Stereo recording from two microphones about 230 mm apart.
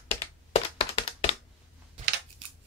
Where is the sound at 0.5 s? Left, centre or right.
Left.